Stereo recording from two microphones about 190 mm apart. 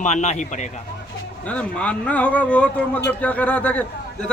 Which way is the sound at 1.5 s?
5° left (ahead or behind).